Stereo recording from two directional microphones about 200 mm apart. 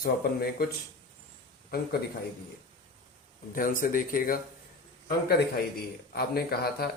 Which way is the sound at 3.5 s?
45° left (ahead or behind).